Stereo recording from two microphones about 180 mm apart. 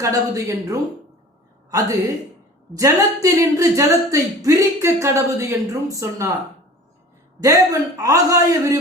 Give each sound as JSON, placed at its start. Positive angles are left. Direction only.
{"t": 0.0, "sound": "a man's voice", "side_deg": -20}
{"t": 2.7, "sound": "speech", "side_deg": -20}
{"t": 7.4, "sound": "a man's voice", "side_deg": -20}